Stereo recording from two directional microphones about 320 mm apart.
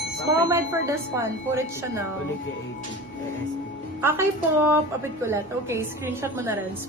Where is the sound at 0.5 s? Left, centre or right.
Centre.